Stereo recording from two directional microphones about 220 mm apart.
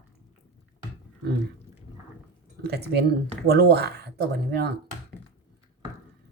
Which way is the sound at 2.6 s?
45° right (ahead or behind).